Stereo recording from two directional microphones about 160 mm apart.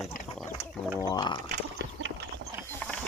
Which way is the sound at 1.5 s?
90° right.